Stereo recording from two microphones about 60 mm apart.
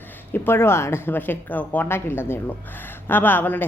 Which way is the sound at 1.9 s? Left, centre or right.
Left.